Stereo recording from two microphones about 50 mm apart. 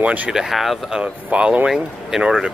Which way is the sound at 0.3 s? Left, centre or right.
Centre.